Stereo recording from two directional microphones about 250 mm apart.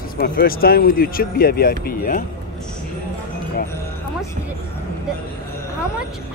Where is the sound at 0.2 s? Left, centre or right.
Left.